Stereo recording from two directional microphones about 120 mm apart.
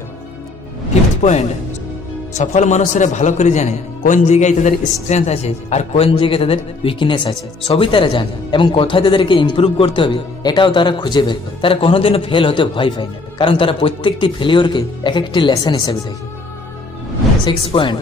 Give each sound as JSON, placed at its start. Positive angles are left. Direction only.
{"t": 2.3, "sound": "a man's voice", "side_deg": 80}
{"t": 17.6, "sound": "a man's voice", "side_deg": 45}